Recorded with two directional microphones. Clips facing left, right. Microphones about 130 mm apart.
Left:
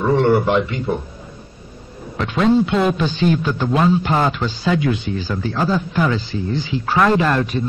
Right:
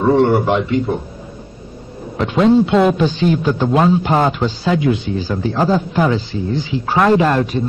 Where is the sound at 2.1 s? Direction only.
20° right (ahead or behind).